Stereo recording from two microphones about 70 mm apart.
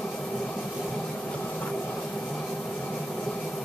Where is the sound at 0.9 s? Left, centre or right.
Centre.